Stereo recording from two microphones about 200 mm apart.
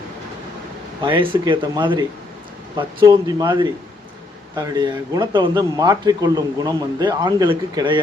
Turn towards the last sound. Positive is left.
turn(degrees=-25)  # may be behind; listen again after turning